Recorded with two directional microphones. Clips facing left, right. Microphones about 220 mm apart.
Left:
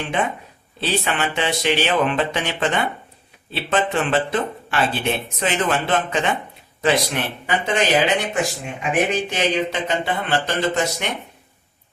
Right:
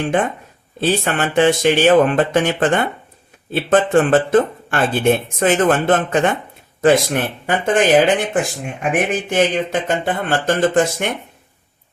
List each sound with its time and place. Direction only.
0.0 s speech: 50° right (ahead or behind)